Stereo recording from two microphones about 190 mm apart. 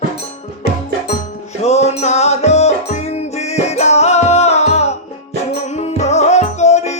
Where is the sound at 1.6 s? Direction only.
35° left (ahead or behind).